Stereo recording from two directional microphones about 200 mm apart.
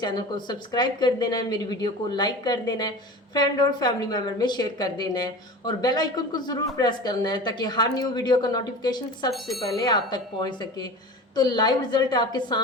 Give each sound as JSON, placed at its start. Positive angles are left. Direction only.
{"t": 0.0, "sound": "a woman's voice", "side_deg": 20}
{"t": 9.3, "sound": "speech", "side_deg": 0}
{"t": 9.7, "sound": "a woman's voice", "side_deg": 20}